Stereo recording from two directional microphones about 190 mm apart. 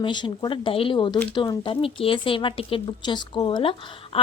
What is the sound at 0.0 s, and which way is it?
A woman's voice, 25° left (ahead or behind).